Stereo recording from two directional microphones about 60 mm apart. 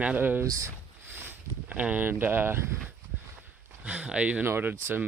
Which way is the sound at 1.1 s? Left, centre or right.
Right.